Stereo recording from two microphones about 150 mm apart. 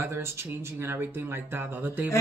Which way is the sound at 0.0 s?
15° right (ahead or behind).